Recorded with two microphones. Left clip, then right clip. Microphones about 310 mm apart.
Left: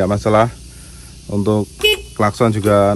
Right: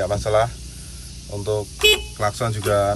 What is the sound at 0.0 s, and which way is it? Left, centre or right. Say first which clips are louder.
Speech: left 5 dB; left.